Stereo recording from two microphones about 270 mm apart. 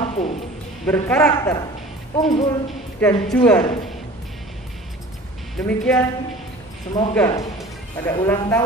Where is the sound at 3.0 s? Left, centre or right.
Centre.